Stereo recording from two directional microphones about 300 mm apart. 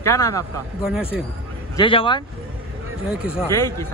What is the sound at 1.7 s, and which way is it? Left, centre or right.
Speech, centre.